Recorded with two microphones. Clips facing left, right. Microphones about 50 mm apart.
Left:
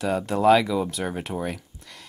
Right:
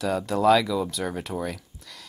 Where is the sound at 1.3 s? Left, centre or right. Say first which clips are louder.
Left 1 dB; centre.